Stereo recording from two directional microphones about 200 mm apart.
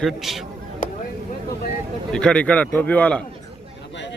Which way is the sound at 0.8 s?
40° left (ahead or behind).